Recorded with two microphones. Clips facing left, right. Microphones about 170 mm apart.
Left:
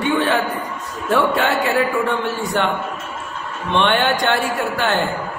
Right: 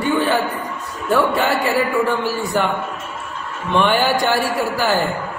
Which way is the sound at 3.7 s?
5° right (ahead or behind).